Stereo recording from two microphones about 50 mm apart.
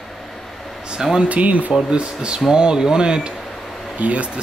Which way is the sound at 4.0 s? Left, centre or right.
Right.